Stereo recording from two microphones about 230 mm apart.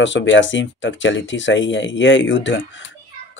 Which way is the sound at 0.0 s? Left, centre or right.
Left.